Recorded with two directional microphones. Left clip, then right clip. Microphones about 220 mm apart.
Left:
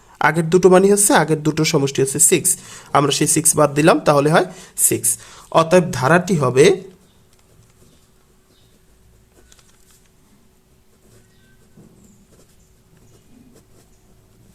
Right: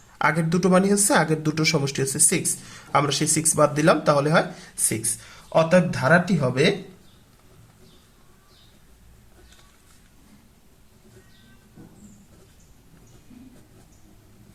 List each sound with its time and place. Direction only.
0.1 s a woman's voice: 30° left (ahead or behind)